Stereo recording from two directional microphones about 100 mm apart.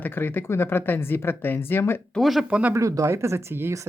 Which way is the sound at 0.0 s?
20° left (ahead or behind).